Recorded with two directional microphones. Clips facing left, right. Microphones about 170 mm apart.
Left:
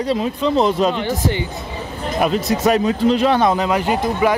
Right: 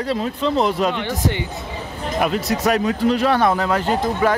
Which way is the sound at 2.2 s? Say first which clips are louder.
Left 2 dB; 20° left (ahead or behind).